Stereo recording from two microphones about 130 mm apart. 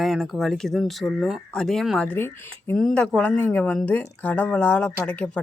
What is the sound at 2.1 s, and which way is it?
Speech, 20° left (ahead or behind).